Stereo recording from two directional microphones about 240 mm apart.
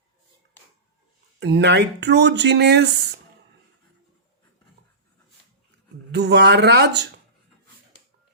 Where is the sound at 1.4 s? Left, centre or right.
Right.